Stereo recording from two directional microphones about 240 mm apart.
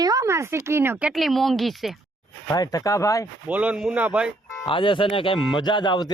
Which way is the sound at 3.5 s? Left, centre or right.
Centre.